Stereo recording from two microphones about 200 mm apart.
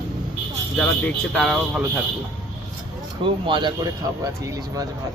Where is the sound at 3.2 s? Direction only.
25° right (ahead or behind).